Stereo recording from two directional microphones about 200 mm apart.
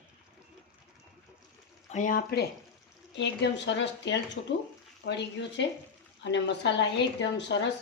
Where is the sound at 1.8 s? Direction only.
40° left (ahead or behind).